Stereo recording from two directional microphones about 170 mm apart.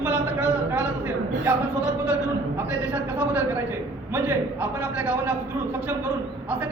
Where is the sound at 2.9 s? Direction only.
10° right (ahead or behind).